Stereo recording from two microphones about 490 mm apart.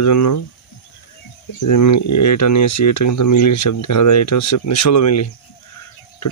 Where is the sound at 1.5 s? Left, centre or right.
Left.